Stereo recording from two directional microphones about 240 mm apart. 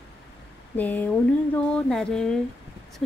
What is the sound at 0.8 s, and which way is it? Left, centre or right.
Speech, centre.